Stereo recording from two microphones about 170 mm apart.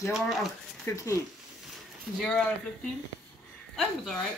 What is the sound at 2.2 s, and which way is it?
Speech, 5° left (ahead or behind).